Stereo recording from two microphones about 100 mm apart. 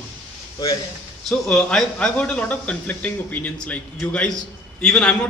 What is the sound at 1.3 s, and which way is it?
Speech, 5° left (ahead or behind).